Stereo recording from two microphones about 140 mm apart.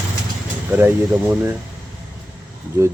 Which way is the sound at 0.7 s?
15° right (ahead or behind).